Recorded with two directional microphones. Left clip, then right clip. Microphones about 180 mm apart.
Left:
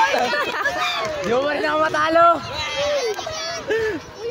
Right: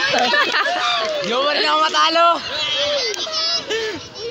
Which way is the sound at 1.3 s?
70° left (ahead or behind).